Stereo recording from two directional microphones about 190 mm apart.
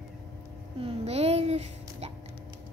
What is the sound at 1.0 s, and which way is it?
Music, 35° right (ahead or behind).